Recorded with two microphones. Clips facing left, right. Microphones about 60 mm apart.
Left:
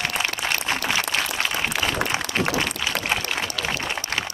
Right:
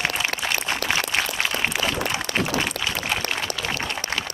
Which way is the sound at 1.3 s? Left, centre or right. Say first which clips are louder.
Even; centre.